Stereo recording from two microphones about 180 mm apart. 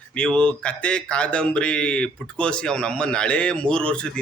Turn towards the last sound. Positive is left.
turn(degrees=5)  # may be behind; listen again after turning